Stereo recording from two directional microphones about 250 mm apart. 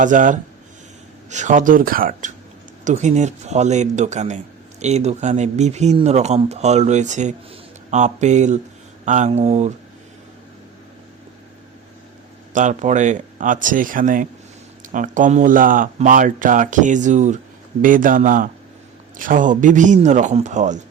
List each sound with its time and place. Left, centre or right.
0.0 s speech: right
12.5 s speech: right